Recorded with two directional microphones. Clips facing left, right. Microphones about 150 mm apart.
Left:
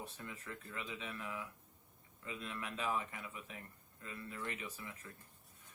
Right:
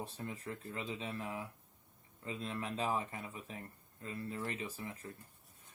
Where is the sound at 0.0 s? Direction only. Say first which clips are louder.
Right 5 dB; 35° right (ahead or behind).